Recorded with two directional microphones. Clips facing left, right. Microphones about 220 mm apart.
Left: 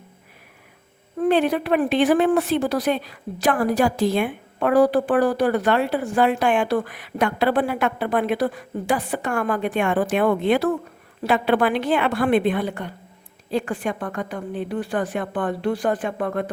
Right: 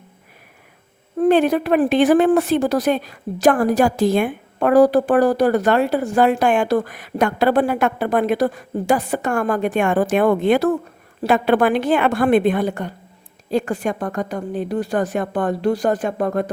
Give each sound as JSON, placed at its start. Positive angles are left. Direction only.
{"t": 1.2, "sound": "a woman's voice", "side_deg": -45}